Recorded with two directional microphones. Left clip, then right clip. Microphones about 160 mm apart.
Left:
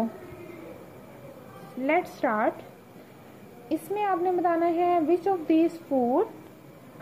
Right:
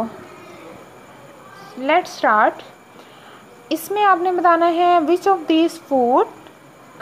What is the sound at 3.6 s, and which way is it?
A woman's voice, 20° right (ahead or behind).